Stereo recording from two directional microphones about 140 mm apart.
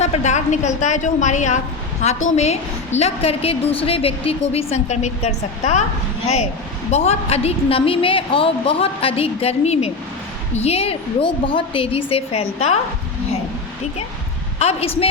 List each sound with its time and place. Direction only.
0.0 s a woman's voice: 55° left (ahead or behind)
14.6 s a woman's voice: 45° left (ahead or behind)